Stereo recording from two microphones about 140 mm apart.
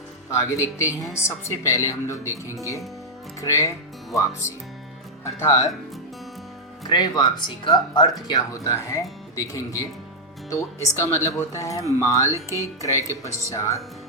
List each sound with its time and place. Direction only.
0.3 s speech: 20° left (ahead or behind)
6.8 s speech: 30° left (ahead or behind)